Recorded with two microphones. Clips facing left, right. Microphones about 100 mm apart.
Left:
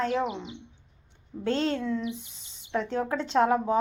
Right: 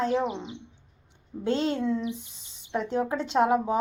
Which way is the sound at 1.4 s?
10° right (ahead or behind).